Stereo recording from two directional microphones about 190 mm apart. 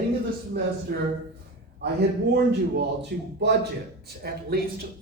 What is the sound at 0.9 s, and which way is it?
Speech, 50° right (ahead or behind).